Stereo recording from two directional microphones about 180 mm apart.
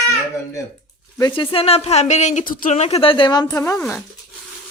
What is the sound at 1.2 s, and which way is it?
Speech, 25° left (ahead or behind).